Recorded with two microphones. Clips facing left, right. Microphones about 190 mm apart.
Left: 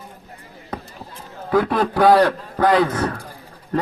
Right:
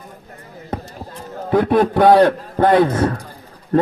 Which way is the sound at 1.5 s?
25° right (ahead or behind).